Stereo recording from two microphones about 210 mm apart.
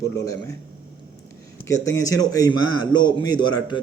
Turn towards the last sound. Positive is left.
turn(degrees=20)  # may be behind; listen again after turning